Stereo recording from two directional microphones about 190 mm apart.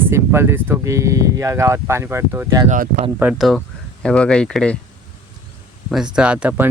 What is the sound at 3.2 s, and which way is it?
Speech, 5° right (ahead or behind).